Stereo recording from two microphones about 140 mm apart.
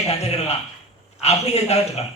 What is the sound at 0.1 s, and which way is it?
A man's voice, 50° left (ahead or behind).